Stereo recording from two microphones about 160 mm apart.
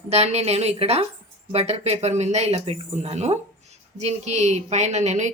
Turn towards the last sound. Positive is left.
turn(degrees=-50)  # may be behind; listen again after turning